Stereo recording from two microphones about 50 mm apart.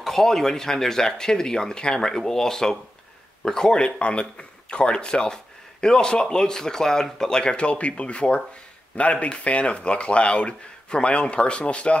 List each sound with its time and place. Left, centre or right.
0.0 s speech: centre; by 12.0 s left